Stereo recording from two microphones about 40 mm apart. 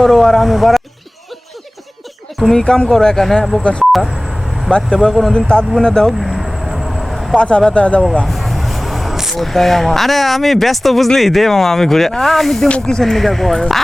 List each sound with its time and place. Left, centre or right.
0.0 s speech: centre
2.5 s speech: centre
3.6 s speech: left
3.9 s vehicle: centre
5.0 s speech: centre
6.1 s vehicle: centre
7.3 s speech: left
8.3 s a sound: centre
9.3 s speech: centre